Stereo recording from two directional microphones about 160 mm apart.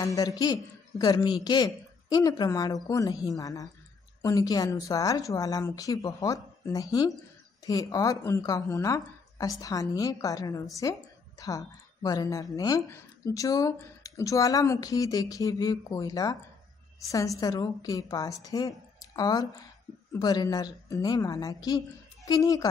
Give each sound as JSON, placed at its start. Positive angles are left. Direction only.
{"t": 0.0, "sound": "a woman's voice", "side_deg": 20}